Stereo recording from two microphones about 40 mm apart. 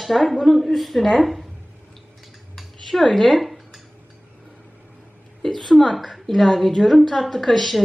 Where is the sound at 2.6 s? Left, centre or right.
Centre.